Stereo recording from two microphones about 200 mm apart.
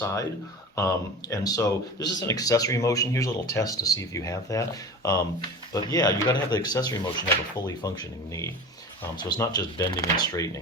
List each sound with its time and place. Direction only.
0.0 s speech: 15° left (ahead or behind)
5.7 s speech: 20° left (ahead or behind)